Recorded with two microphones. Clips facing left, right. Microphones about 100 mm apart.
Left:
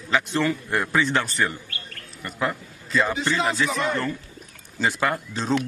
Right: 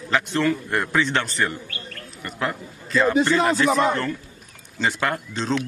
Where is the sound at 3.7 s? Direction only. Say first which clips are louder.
Right 6 dB; 35° right (ahead or behind).